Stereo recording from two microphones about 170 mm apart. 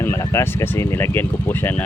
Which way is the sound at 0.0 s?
15° left (ahead or behind).